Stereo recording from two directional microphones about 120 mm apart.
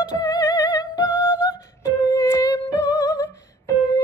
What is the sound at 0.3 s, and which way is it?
Music, 30° left (ahead or behind).